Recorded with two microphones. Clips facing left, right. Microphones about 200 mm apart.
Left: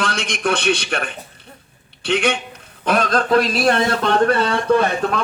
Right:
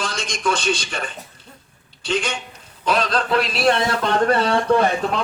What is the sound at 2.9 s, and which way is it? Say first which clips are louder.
A man's voice: left 3 dB; 50° left (ahead or behind).